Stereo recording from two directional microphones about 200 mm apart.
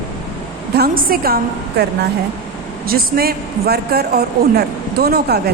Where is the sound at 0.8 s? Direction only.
45° right (ahead or behind).